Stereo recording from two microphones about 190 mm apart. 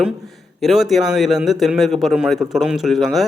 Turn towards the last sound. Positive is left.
turn(degrees=0)  # may be behind; listen again after turning